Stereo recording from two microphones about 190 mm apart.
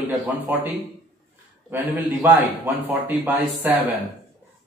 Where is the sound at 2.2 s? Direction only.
10° right (ahead or behind).